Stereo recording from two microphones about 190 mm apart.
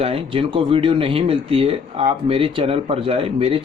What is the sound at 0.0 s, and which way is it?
Speech, 30° right (ahead or behind).